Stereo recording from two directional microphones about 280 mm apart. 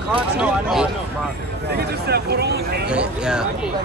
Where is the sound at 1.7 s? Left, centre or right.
Right.